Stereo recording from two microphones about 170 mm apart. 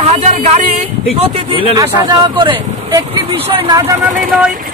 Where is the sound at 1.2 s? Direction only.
30° right (ahead or behind).